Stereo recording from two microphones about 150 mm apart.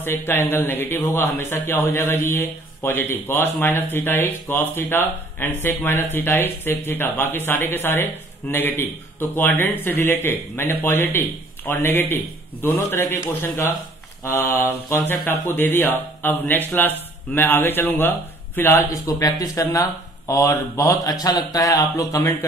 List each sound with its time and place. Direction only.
0.0 s speech: 15° left (ahead or behind)
14.2 s speech: 20° left (ahead or behind)